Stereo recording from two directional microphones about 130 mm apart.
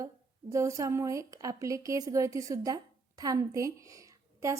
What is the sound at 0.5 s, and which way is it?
A woman's voice, 25° right (ahead or behind).